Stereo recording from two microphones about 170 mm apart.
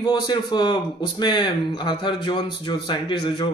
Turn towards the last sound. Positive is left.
turn(degrees=25)  # may be behind; listen again after turning